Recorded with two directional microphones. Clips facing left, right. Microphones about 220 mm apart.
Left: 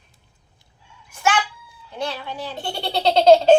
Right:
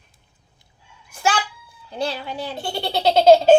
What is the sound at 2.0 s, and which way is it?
Speech, 35° right (ahead or behind).